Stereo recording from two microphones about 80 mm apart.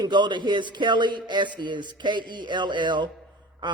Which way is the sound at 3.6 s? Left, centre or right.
Right.